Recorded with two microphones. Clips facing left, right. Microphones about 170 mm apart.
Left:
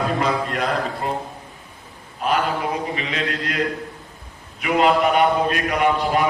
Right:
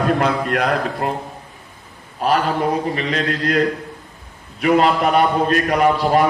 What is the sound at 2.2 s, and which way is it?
A man's voice, 35° right (ahead or behind).